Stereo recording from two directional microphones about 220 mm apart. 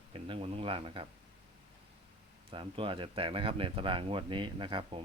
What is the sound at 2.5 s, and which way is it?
Speech, 25° right (ahead or behind).